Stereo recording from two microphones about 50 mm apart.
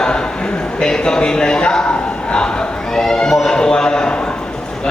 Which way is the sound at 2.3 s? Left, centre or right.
Centre.